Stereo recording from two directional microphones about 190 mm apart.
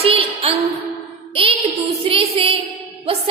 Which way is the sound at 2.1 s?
30° right (ahead or behind).